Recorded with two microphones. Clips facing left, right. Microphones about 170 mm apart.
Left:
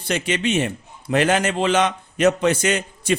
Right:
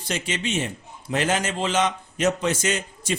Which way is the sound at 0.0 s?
60° left (ahead or behind).